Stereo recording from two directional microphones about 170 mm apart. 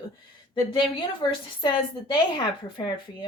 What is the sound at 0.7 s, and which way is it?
A woman's voice, 30° left (ahead or behind).